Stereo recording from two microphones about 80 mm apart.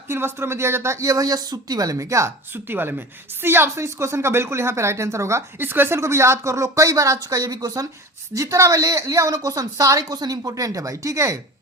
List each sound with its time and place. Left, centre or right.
0.1 s speech: right
2.6 s a woman's voice: right